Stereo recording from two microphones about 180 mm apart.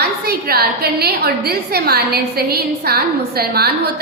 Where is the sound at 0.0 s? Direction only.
60° right (ahead or behind).